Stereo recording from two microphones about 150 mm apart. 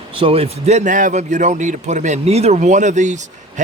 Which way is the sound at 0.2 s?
40° right (ahead or behind).